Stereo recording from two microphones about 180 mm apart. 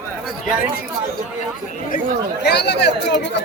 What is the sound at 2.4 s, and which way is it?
Speech, 70° left (ahead or behind).